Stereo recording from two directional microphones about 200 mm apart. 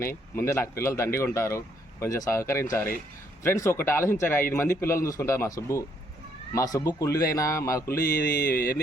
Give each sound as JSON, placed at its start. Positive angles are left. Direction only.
{"t": 0.0, "sound": "speech", "side_deg": 15}
{"t": 8.0, "sound": "mantra", "side_deg": 45}